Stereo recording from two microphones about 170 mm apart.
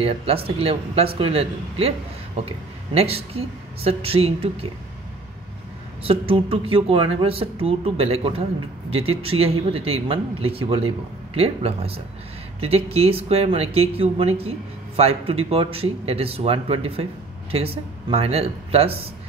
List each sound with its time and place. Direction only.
0.0 s speech: 35° right (ahead or behind)
6.0 s speech: 35° right (ahead or behind)